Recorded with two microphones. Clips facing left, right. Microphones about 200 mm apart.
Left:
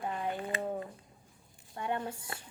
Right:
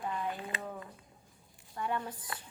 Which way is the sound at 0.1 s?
30° left (ahead or behind).